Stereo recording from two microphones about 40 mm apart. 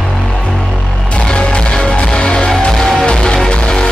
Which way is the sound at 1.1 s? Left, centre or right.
Left.